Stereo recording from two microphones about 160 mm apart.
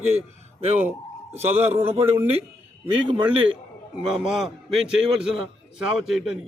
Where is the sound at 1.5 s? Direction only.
15° right (ahead or behind).